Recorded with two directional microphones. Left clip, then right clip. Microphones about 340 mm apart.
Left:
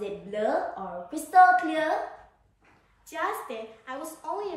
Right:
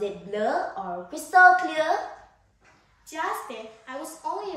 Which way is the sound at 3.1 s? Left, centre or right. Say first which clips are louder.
Right 1 dB; centre.